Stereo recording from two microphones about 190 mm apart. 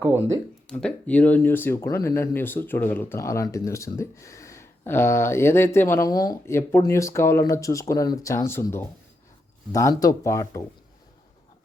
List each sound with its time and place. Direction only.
0.7 s speech: 5° left (ahead or behind)